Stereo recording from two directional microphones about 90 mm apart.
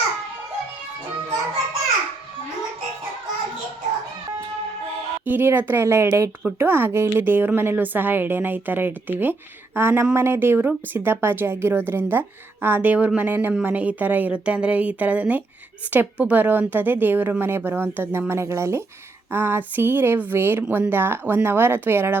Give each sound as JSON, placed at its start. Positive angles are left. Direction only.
{"t": 5.2, "sound": "a woman's voice", "side_deg": -25}
{"t": 6.6, "sound": "a woman's voice", "side_deg": -25}